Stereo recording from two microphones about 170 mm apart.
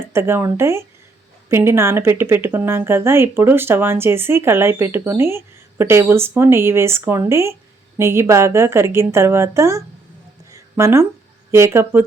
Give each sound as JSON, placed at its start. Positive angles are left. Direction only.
{"t": 0.1, "sound": "a woman's voice", "side_deg": -15}
{"t": 10.5, "sound": "a sound", "side_deg": -15}
{"t": 11.5, "sound": "a woman's voice", "side_deg": -15}